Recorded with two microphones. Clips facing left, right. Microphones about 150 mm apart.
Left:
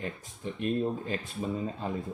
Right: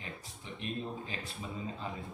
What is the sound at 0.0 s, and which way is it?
Speech, 50° left (ahead or behind).